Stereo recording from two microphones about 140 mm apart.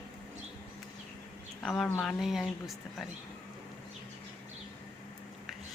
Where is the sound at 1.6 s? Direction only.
Centre (ahead or behind).